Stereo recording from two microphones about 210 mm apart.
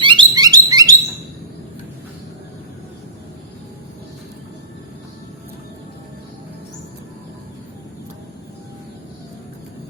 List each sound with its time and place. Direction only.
0.0 s bird: 20° right (ahead or behind)